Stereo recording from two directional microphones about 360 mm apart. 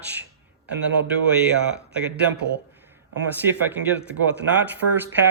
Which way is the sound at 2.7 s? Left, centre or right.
Centre.